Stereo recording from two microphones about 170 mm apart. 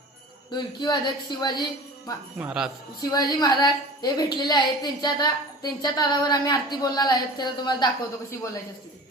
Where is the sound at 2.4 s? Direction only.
5° right (ahead or behind).